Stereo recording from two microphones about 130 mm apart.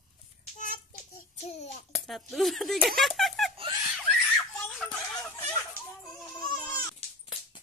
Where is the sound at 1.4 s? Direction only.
55° left (ahead or behind).